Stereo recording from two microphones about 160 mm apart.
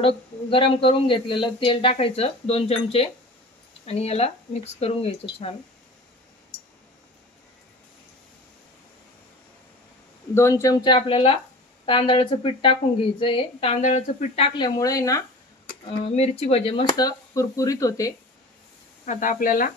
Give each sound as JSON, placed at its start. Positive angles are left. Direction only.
{"t": 0.0, "sound": "a woman's voice", "side_deg": 35}
{"t": 10.3, "sound": "a woman's voice", "side_deg": 20}
{"t": 16.2, "sound": "a woman's voice", "side_deg": 40}
{"t": 16.9, "sound": "speech", "side_deg": 20}
{"t": 19.0, "sound": "speech", "side_deg": 55}